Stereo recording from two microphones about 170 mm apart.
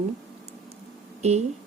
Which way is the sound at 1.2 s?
40° right (ahead or behind).